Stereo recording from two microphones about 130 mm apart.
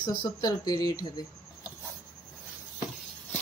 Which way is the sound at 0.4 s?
30° left (ahead or behind).